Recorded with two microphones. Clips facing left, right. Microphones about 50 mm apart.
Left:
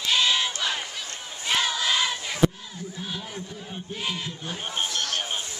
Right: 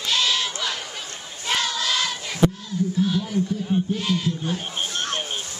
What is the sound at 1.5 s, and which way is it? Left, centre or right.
Choir, centre.